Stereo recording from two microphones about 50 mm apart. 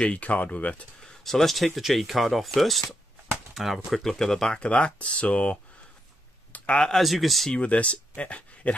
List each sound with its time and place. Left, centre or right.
0.0 s speech: left
1.0 s speech: centre
4.6 s speech: left
6.5 s a sound: left
6.8 s speech: centre
7.5 s speech: left